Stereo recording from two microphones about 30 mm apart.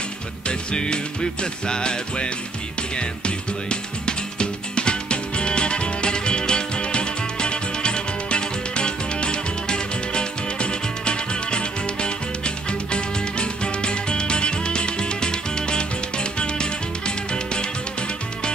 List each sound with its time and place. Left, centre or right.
0.5 s music: left